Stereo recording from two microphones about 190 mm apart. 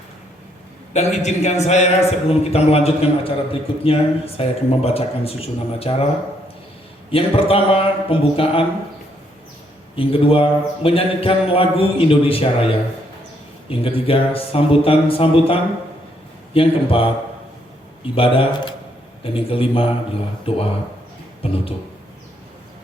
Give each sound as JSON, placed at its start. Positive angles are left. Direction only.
{"t": 0.9, "sound": "a man's voice", "side_deg": 35}
{"t": 7.1, "sound": "speech", "side_deg": 30}
{"t": 9.9, "sound": "speech", "side_deg": 30}
{"t": 13.7, "sound": "speech", "side_deg": 30}